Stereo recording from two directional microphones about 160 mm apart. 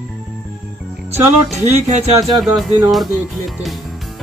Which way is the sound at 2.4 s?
Centre (ahead or behind).